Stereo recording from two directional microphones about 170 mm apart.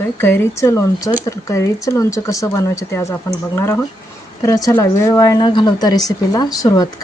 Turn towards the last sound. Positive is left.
turn(degrees=20)  # may be behind; listen again after turning